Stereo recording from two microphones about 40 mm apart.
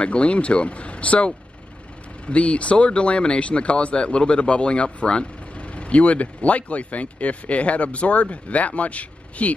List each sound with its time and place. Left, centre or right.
0.0 s speech: left